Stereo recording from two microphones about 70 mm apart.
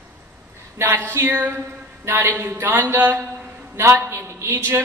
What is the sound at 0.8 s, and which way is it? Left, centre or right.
Speech, right.